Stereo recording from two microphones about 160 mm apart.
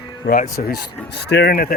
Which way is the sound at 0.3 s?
70° left (ahead or behind).